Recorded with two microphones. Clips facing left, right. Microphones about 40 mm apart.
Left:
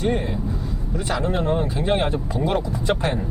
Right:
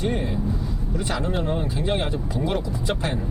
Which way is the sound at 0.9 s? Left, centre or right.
Centre.